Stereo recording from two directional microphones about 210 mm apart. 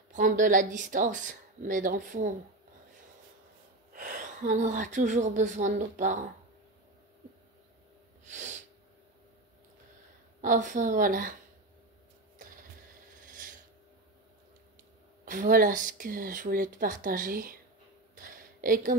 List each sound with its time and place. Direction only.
0.1 s speech: 40° right (ahead or behind)
3.9 s speech: 40° right (ahead or behind)
8.3 s sneeze: 35° right (ahead or behind)
10.4 s speech: 40° right (ahead or behind)
15.2 s speech: 40° right (ahead or behind)
18.1 s a sound: 40° right (ahead or behind)